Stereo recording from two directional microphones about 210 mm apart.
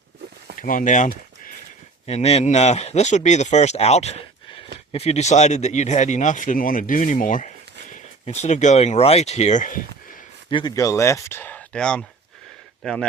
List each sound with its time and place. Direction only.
0.6 s speech: 40° left (ahead or behind)
10.5 s speech: 20° left (ahead or behind); by 13.1 s 5° left (ahead or behind)